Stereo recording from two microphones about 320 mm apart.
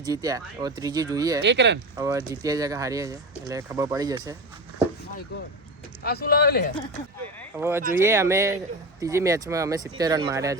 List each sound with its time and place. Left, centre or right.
0.0 s speech: centre
1.4 s speech: right
2.0 s speech: centre
6.0 s speech: left
7.5 s speech: centre